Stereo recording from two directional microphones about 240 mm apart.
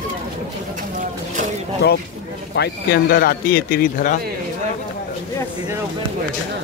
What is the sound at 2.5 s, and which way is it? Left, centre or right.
Speech, left.